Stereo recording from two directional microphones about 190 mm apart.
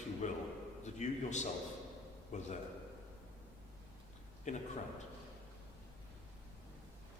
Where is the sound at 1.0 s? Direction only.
40° left (ahead or behind).